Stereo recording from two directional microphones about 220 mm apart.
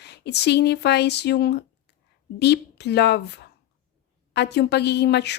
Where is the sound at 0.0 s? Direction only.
50° left (ahead or behind).